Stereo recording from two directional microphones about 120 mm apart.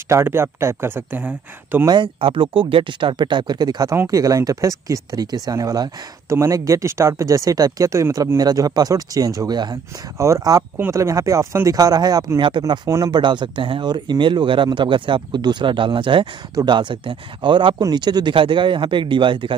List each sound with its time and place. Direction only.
0.1 s speech: 20° right (ahead or behind)
1.9 s speech: 45° right (ahead or behind)
3.9 s speech: 25° right (ahead or behind); by 19.5 s 45° right (ahead or behind)